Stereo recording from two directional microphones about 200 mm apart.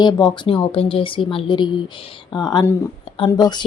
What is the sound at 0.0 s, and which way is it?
Speech, 20° left (ahead or behind).